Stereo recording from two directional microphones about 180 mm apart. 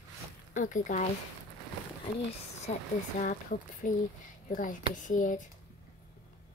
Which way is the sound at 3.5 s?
55° left (ahead or behind).